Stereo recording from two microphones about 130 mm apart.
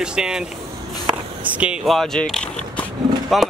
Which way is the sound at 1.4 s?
10° right (ahead or behind).